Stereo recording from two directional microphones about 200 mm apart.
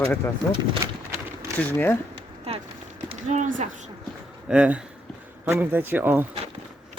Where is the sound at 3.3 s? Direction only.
40° right (ahead or behind).